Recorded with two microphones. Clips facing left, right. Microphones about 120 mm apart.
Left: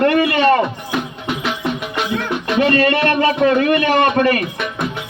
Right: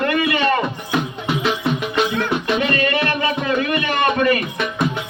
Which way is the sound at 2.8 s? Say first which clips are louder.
Left 5 dB; 60° left (ahead or behind).